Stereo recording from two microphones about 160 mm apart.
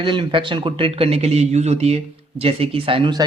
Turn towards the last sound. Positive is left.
turn(degrees=-30)  # may be behind; listen again after turning